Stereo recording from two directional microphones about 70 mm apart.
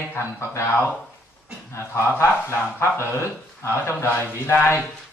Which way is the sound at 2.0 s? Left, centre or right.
Left.